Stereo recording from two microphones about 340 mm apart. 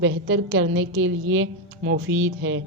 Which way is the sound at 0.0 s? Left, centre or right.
Right.